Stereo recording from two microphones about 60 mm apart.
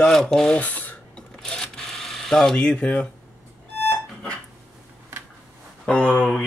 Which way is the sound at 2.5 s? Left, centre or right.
Centre.